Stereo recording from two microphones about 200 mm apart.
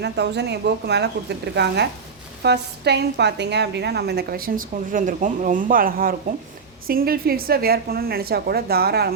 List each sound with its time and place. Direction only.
0.0 s a woman's voice: 55° right (ahead or behind)